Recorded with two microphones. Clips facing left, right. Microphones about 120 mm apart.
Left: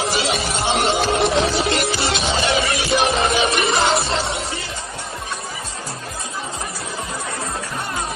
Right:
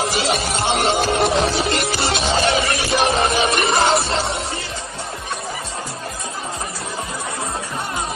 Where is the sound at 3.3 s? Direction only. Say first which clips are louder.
Right 1 dB; 40° right (ahead or behind).